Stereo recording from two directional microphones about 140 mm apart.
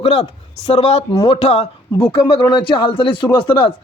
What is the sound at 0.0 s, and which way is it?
Speech, 45° left (ahead or behind).